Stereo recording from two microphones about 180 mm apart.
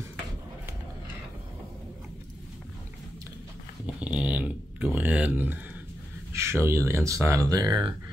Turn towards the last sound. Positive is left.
turn(degrees=-20)  # may be behind; listen again after turning